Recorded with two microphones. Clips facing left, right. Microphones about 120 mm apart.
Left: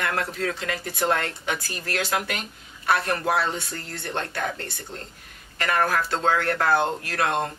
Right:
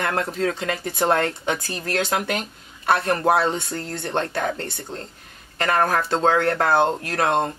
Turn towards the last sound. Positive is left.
turn(degrees=-30)  # may be behind; listen again after turning